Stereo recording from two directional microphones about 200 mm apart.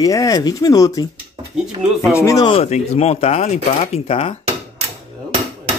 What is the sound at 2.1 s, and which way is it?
Speech, 15° left (ahead or behind).